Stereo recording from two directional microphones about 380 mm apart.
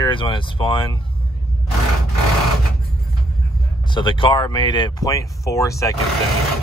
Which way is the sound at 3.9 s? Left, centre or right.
Centre.